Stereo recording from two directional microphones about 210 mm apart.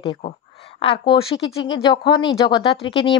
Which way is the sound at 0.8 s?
25° left (ahead or behind).